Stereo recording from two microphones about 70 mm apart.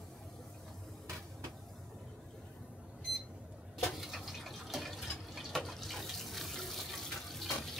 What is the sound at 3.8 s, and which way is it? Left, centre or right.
Water, centre.